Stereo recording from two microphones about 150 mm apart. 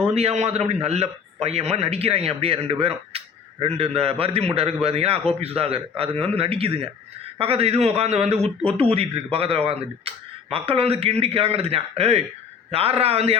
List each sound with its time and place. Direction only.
0.1 s a man's voice: 45° right (ahead or behind)